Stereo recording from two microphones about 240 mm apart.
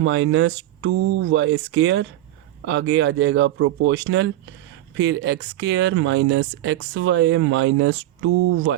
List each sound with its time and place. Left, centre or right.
0.0 s speech: right